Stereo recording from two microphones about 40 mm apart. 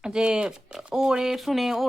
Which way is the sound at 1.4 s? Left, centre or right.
Centre.